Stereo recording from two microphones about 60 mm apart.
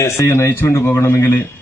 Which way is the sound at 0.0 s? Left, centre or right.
Left.